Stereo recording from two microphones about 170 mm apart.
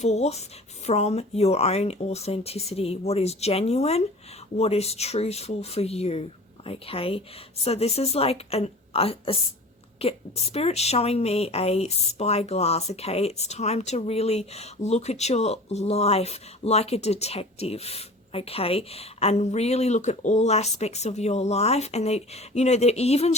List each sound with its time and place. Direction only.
0.0 s a woman's voice: 40° left (ahead or behind)